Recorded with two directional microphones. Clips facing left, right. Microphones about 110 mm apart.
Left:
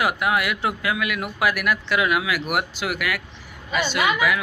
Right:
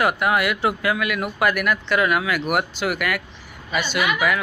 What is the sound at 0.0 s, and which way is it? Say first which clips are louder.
Speech: right 2 dB; centre (ahead or behind).